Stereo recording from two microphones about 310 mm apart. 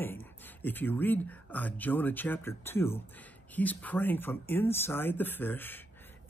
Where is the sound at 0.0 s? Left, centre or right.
Centre.